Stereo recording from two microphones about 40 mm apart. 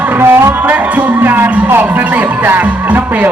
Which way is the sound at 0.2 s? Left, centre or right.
Right.